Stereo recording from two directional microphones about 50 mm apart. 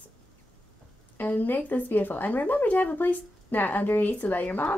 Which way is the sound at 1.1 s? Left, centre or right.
Left.